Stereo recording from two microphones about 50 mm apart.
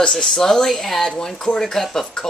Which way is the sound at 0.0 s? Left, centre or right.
Centre.